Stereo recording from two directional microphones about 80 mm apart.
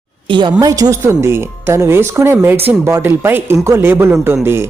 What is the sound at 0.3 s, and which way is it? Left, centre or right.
Speech, right.